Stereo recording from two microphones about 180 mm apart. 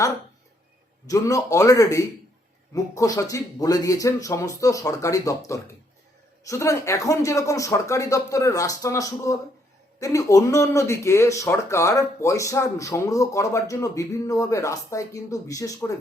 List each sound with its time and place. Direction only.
1.0 s speech: 20° left (ahead or behind)
6.5 s speech: 15° left (ahead or behind)